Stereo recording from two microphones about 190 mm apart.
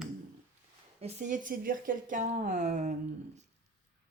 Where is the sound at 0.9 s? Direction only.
35° right (ahead or behind).